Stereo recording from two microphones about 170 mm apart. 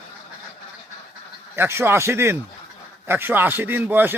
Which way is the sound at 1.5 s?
15° right (ahead or behind).